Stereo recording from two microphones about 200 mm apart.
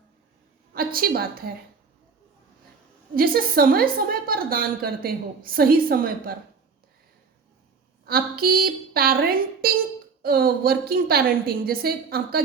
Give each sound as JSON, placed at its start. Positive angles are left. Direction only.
{"t": 0.7, "sound": "a woman's voice", "side_deg": -50}
{"t": 3.2, "sound": "a woman's voice", "side_deg": -50}
{"t": 8.0, "sound": "a woman's voice", "side_deg": -50}